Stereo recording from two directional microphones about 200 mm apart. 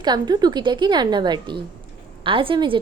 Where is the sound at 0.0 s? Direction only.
20° right (ahead or behind).